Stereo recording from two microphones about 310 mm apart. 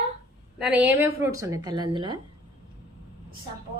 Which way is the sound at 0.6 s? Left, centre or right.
Centre.